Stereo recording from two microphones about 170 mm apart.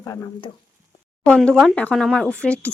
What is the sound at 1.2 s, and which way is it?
Speech, 5° left (ahead or behind).